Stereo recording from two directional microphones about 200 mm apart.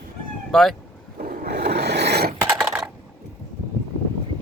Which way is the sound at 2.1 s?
55° right (ahead or behind).